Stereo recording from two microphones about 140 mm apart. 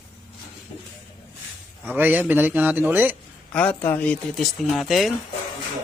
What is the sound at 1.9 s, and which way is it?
A man's voice, 15° right (ahead or behind).